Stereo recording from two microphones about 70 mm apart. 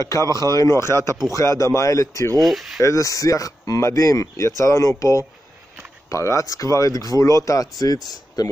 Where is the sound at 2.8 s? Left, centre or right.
Left.